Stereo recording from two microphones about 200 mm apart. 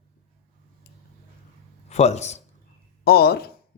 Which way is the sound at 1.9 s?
35° left (ahead or behind).